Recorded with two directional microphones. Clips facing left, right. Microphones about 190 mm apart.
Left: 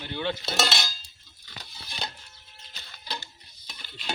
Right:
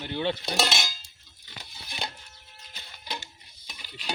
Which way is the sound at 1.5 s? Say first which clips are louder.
Even; 15° right (ahead or behind).